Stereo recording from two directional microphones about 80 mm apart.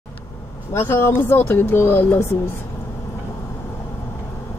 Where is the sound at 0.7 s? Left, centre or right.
Left.